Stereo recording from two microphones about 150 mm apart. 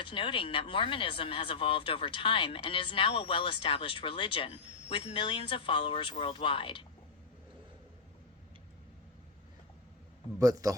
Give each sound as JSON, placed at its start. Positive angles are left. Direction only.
{"t": 0.0, "sound": "speech", "side_deg": 35}
{"t": 10.3, "sound": "a man's voice", "side_deg": -20}